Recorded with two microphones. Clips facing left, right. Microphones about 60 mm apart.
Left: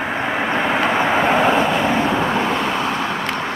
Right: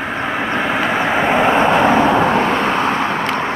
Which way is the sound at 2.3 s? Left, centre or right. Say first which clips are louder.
Right 4 dB; right.